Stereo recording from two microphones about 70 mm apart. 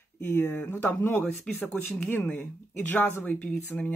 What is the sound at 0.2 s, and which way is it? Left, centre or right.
Speech, left.